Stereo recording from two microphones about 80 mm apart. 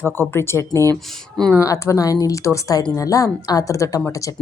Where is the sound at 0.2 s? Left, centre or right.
Left.